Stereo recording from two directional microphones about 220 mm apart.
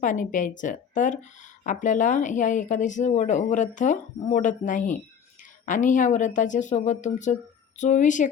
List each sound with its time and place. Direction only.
0.0 s speech: 35° left (ahead or behind)